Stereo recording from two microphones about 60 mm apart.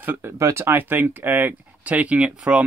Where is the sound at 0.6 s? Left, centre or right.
Right.